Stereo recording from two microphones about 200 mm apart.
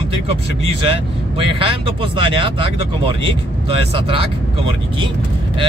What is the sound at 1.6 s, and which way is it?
Speech, 25° right (ahead or behind).